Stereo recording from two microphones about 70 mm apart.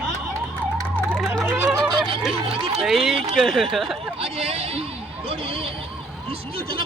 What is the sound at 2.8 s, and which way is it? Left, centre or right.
Speech, centre.